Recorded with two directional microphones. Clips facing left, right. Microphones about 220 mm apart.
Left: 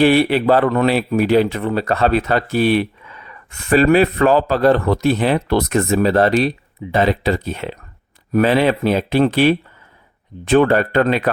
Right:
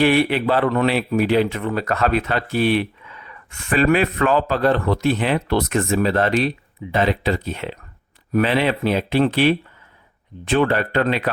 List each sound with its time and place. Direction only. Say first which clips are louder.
0.0 s speech: left 4 dB; 35° left (ahead or behind)